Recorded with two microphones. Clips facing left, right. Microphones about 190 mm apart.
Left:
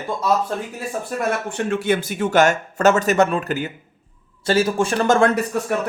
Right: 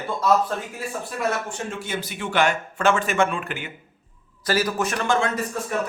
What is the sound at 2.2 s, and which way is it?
Speech, 45° left (ahead or behind).